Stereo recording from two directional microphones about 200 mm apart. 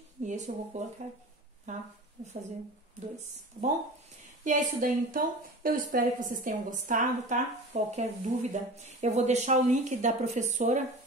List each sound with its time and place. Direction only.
0.2 s a woman's voice: 35° right (ahead or behind)
3.6 s a woman's voice: 30° right (ahead or behind)